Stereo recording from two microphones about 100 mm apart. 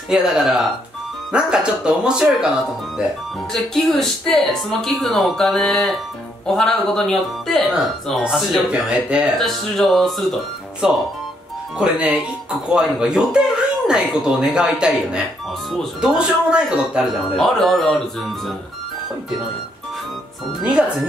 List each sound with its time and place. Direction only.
0.1 s speech: 5° right (ahead or behind)
3.5 s speech: centre (ahead or behind)
10.8 s speech: 10° right (ahead or behind)
16.2 s speech: 10° right (ahead or behind)